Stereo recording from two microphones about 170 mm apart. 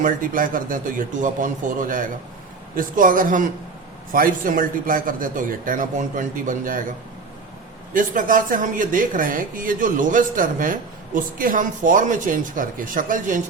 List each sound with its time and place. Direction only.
0.0 s a woman's voice: 55° right (ahead or behind)
7.9 s a woman's voice: 55° right (ahead or behind)